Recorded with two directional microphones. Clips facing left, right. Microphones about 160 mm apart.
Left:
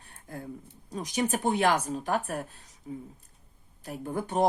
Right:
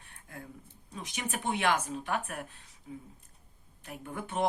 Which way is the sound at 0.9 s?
40° left (ahead or behind).